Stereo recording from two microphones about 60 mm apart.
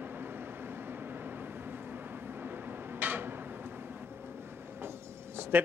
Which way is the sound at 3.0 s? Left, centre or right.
Right.